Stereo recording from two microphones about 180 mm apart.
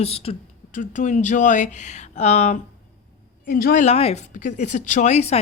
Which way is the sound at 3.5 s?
55° left (ahead or behind).